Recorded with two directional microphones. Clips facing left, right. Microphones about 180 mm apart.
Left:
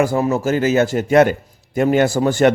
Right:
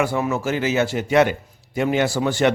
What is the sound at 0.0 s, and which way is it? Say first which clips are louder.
A man's voice: left 5 dB; 40° left (ahead or behind).